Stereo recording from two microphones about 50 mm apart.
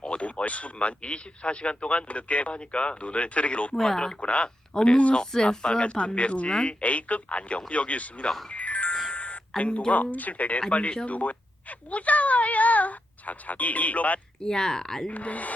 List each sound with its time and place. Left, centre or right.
0.0 s speech: left
3.8 s speech: centre; by 8.3 s left
8.4 s music: left
9.1 s a sound: left
9.6 s speech: left
14.4 s speech: centre
15.1 s speech: left